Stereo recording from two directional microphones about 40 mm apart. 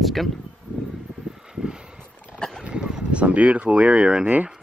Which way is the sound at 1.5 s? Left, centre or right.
Centre.